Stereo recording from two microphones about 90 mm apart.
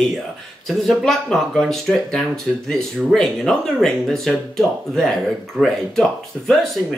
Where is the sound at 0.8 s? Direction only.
5° left (ahead or behind).